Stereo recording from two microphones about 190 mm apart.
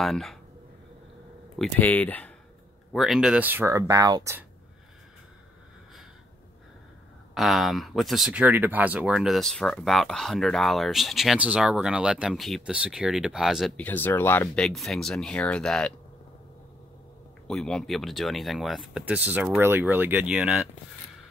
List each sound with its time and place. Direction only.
0.0 s speech: centre (ahead or behind)
1.6 s speech: 10° left (ahead or behind); by 4.5 s 15° right (ahead or behind)
7.3 s speech: centre (ahead or behind)
17.5 s speech: 5° left (ahead or behind)